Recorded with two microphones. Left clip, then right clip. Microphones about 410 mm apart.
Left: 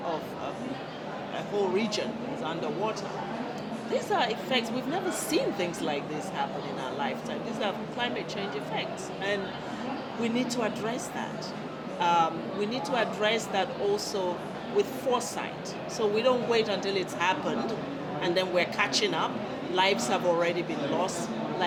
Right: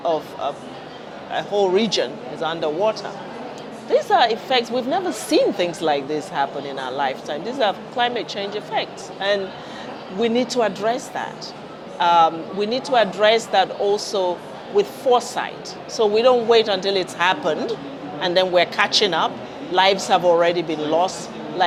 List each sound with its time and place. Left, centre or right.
1.5 s a woman's voice: right
3.9 s a woman's voice: right